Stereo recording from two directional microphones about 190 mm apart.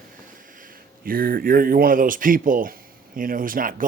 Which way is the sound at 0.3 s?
45° right (ahead or behind).